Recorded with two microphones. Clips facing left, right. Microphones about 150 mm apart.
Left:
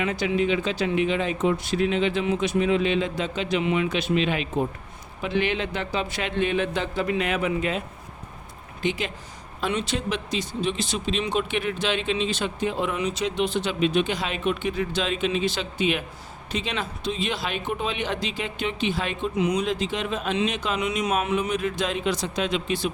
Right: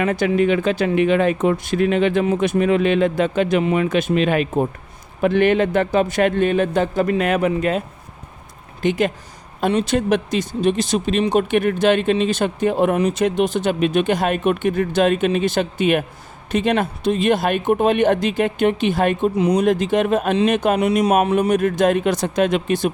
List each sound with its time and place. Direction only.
0.0 s speech: 50° right (ahead or behind)
8.8 s speech: 50° right (ahead or behind)
19.4 s speech: 35° right (ahead or behind)
19.6 s speech: 50° right (ahead or behind)
21.3 s speech: 50° right (ahead or behind)